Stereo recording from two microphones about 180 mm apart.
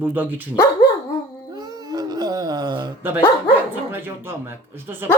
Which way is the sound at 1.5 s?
20° right (ahead or behind).